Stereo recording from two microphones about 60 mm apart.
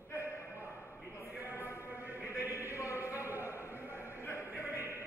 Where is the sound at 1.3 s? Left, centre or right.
Right.